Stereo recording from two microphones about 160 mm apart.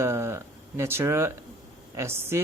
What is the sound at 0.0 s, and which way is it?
Speech, 15° right (ahead or behind).